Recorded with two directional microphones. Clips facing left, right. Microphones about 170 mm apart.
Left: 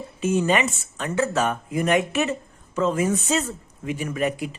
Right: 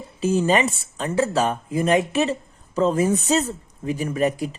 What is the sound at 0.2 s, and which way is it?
A woman's voice, 35° right (ahead or behind).